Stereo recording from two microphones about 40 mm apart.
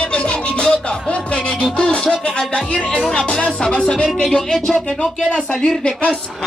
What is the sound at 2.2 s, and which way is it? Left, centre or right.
Speech, left.